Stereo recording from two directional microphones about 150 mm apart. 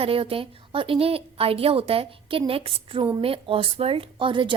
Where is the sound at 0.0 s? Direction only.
40° right (ahead or behind).